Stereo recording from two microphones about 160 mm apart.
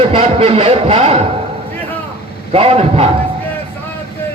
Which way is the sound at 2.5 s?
40° right (ahead or behind).